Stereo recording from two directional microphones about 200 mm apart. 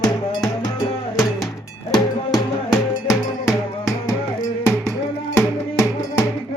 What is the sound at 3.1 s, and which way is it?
Music, 15° left (ahead or behind).